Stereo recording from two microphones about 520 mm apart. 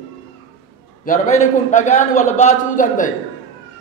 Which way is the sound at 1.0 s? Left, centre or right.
Centre.